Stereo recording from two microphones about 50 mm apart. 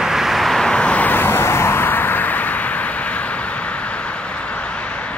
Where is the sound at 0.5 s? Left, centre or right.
Centre.